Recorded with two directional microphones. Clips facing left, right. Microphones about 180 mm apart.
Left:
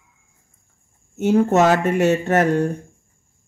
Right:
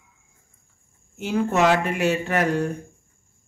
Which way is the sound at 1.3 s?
40° left (ahead or behind).